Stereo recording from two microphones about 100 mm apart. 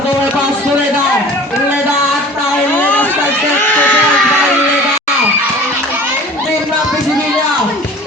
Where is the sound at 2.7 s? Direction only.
15° left (ahead or behind).